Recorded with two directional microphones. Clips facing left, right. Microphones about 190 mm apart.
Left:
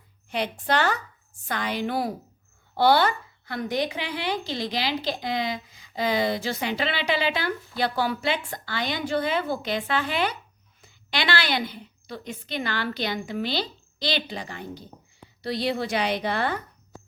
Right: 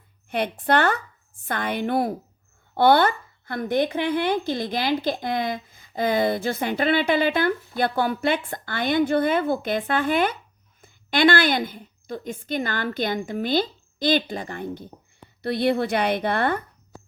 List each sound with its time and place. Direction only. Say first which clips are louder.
0.3 s a woman's voice: right 4 dB; 55° right (ahead or behind)